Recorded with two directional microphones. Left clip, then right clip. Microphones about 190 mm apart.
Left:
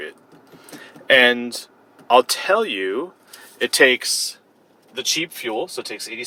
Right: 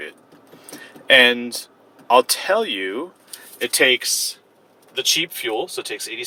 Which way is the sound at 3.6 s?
40° left (ahead or behind).